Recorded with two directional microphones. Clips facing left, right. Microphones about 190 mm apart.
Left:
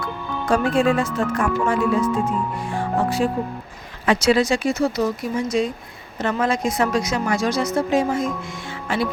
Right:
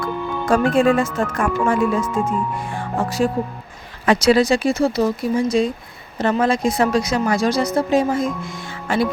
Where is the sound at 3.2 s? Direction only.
40° right (ahead or behind).